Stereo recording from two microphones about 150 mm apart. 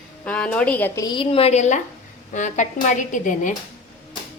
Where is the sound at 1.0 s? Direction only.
30° left (ahead or behind); by 3.5 s 60° left (ahead or behind).